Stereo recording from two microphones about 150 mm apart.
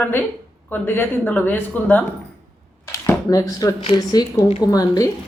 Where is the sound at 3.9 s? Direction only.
25° left (ahead or behind).